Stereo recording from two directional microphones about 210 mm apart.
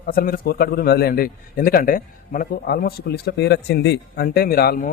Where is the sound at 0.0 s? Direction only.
45° left (ahead or behind).